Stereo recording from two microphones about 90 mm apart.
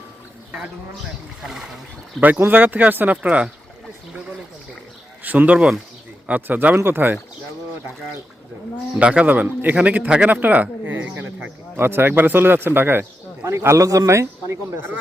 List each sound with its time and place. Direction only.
1.5 s speech: 5° right (ahead or behind)
2.2 s speech: 20° right (ahead or behind)
5.2 s a man's voice: 20° right (ahead or behind)
9.0 s a man's voice: 15° right (ahead or behind)
11.8 s speech: 25° right (ahead or behind)